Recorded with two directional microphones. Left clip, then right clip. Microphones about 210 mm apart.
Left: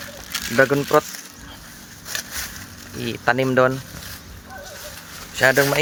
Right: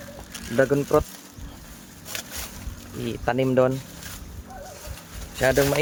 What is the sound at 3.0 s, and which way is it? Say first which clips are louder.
Speech: left 4 dB; 5° left (ahead or behind).